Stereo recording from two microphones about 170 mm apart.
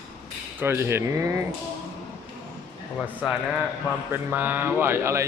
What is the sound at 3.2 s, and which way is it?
Speech, 5° right (ahead or behind).